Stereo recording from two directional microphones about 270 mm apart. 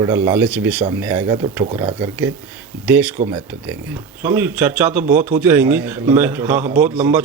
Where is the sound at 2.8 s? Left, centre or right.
Centre.